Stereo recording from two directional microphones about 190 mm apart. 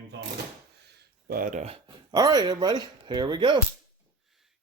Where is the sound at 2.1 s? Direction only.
20° right (ahead or behind).